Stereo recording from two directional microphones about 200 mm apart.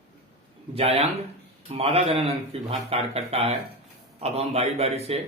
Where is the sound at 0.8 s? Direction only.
30° right (ahead or behind).